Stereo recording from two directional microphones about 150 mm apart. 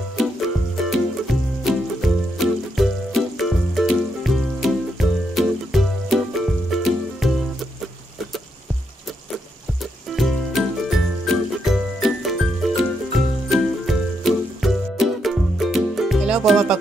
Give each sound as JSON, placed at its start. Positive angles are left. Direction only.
{"t": 0.8, "sound": "music", "side_deg": 0}
{"t": 10.1, "sound": "music", "side_deg": 0}